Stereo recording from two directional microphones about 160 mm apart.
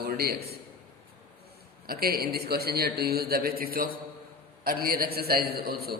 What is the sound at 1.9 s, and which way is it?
A man's voice, 70° right (ahead or behind).